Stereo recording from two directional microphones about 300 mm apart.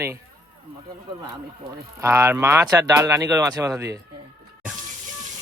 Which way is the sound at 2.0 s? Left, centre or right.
Centre.